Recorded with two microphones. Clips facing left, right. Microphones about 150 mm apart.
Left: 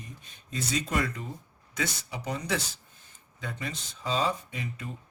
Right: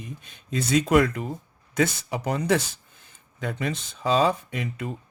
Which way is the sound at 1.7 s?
55° right (ahead or behind).